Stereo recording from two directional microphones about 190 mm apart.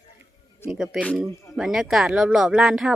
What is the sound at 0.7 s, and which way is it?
Speech, 5° right (ahead or behind).